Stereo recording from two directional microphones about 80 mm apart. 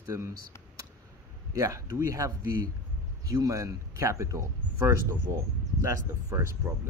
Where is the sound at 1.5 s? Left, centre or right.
Right.